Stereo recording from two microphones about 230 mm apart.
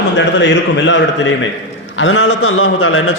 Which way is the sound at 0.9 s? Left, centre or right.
Left.